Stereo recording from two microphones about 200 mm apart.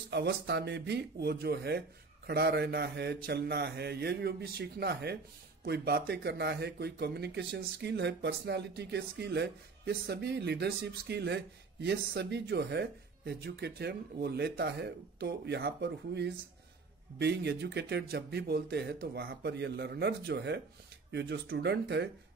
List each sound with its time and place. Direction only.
0.1 s speech: 55° right (ahead or behind)